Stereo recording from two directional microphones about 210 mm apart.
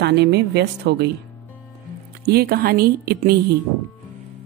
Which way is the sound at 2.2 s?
50° right (ahead or behind).